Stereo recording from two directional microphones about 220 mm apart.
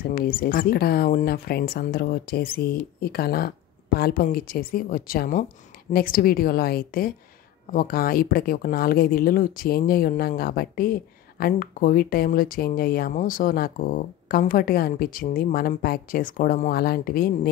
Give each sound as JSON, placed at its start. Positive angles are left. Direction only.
{"t": 0.1, "sound": "speech", "side_deg": 40}